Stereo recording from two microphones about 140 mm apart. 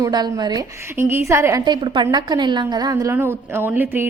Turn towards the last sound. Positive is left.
turn(degrees=-15)  # may be behind; listen again after turning